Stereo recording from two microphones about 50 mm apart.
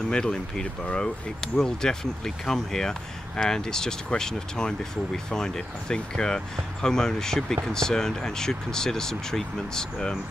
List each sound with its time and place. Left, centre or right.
0.1 s speech: centre